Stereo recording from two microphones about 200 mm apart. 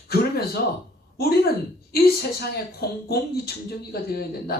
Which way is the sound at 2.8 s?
50° left (ahead or behind).